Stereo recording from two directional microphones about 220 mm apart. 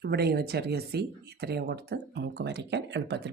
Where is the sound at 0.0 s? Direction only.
45° right (ahead or behind).